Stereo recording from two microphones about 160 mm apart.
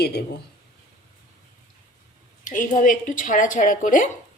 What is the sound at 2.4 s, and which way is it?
A woman's voice, 55° left (ahead or behind).